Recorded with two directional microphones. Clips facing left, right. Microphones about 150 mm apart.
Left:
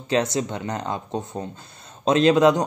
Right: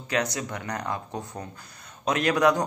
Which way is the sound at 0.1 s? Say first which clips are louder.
Left 6 dB; 25° left (ahead or behind).